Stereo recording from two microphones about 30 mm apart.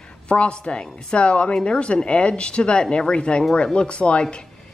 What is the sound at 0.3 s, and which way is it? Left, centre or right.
A woman's voice, left.